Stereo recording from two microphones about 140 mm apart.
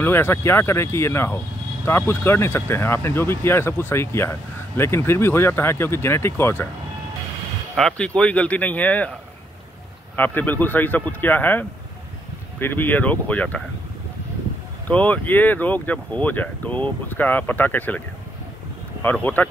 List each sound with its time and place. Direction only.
0.0 s speech: 15° left (ahead or behind)
7.7 s speech: 5° left (ahead or behind)
10.1 s speech: 15° left (ahead or behind)
14.9 s speech: 10° left (ahead or behind)
19.0 s speech: 15° left (ahead or behind)